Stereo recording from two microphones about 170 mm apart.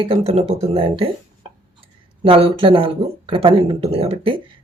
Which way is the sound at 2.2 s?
35° right (ahead or behind).